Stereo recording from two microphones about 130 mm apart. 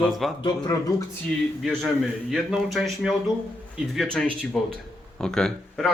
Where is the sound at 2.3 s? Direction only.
Centre (ahead or behind).